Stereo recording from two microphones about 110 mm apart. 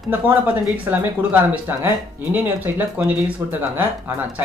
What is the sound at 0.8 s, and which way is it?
Speech, 15° right (ahead or behind).